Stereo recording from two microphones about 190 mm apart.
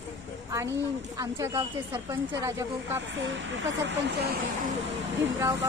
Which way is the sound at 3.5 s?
75° right (ahead or behind).